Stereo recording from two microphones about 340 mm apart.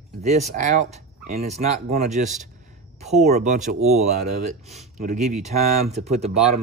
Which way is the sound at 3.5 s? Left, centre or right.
Right.